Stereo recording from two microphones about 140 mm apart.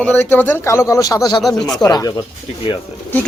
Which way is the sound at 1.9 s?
30° left (ahead or behind).